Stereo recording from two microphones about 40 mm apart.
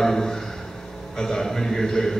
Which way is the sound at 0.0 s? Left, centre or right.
Centre.